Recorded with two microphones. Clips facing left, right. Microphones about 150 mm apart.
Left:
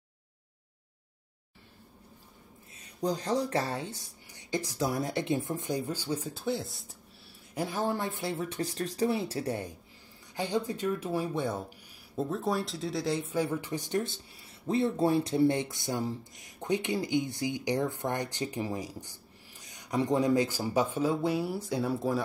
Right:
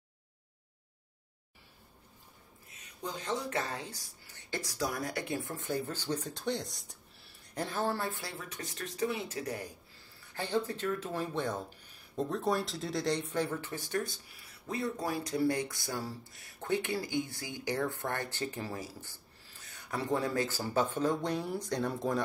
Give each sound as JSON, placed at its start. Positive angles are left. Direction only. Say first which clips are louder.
{"t": 2.7, "sound": "speech", "louder": "left 9 dB", "side_deg": 35}
{"t": 4.3, "sound": "speech", "louder": "left 6 dB", "side_deg": 15}
{"t": 10.3, "sound": "speech", "louder": "left 2 dB", "side_deg": 15}